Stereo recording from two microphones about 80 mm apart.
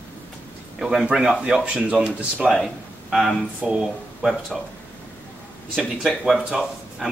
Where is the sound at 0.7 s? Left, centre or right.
Centre.